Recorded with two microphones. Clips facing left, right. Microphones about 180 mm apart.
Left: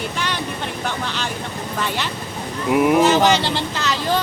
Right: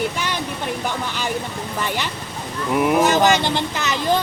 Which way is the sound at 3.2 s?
15° right (ahead or behind).